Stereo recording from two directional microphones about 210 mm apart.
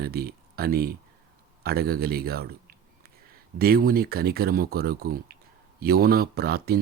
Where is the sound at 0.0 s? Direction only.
45° right (ahead or behind).